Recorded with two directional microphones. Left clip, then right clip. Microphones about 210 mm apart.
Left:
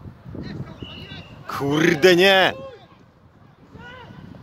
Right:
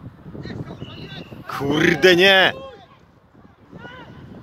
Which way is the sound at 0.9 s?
20° left (ahead or behind).